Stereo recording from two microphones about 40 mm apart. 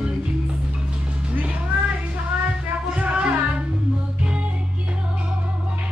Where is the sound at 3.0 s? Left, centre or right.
Right.